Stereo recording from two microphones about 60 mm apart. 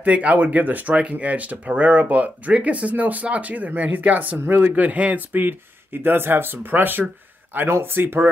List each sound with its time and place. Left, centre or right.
0.0 s speech: right